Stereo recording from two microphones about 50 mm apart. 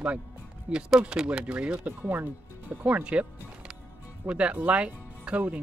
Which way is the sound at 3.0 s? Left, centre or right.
Right.